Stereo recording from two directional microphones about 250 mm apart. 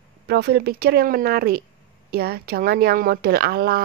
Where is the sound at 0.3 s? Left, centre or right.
Right.